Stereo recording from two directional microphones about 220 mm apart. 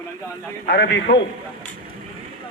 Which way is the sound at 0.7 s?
50° left (ahead or behind).